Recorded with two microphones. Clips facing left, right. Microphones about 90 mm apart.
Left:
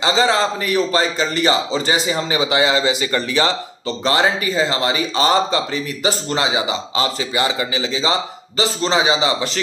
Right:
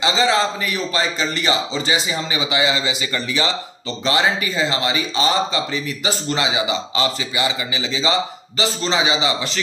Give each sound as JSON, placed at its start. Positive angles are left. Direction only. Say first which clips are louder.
{"t": 0.0, "sound": "a man's voice", "louder": "left 1 dB", "side_deg": 35}